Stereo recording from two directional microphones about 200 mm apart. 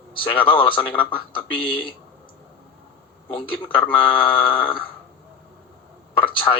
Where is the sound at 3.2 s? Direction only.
25° left (ahead or behind).